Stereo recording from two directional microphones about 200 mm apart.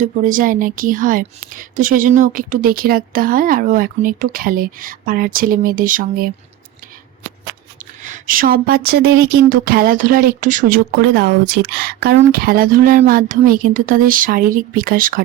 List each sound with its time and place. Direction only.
0.0 s speech: 40° right (ahead or behind)
8.0 s speech: 40° right (ahead or behind)